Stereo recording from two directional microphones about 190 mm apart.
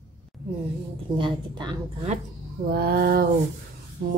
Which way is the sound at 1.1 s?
25° right (ahead or behind).